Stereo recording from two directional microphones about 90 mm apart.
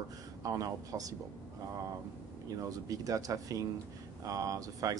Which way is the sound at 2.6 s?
40° right (ahead or behind).